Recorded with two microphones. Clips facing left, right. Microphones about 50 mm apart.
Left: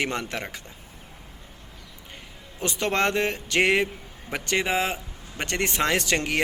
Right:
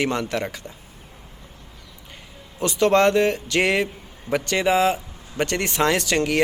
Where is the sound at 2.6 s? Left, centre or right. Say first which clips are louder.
Right 7 dB; left.